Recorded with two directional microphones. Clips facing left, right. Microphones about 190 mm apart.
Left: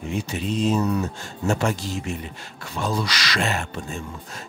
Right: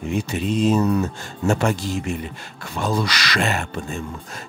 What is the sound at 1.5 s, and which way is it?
Speech, 60° right (ahead or behind).